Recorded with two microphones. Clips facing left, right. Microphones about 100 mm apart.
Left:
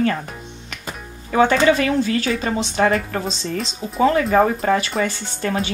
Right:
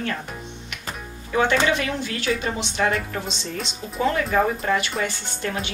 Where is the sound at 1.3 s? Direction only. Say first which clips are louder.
Left 5 dB; 35° left (ahead or behind).